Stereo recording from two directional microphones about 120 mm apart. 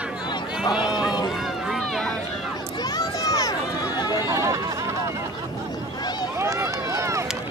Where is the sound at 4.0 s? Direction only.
35° left (ahead or behind).